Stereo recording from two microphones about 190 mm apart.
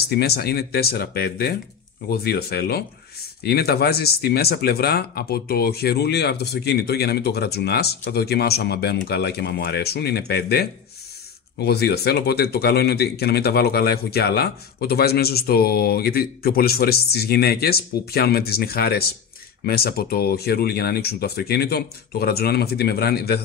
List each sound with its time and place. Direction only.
0.0 s speech: 55° left (ahead or behind)